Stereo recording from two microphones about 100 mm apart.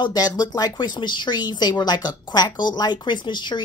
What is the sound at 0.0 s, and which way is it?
A woman's voice, 40° left (ahead or behind).